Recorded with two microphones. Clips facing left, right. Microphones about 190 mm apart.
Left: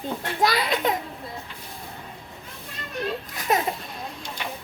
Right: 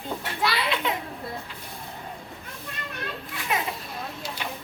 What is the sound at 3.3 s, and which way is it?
Children playing, 40° left (ahead or behind).